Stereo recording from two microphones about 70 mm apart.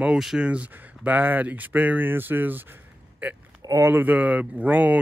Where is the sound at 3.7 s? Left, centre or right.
Right.